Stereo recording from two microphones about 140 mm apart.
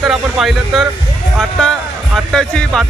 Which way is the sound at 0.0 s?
5° right (ahead or behind).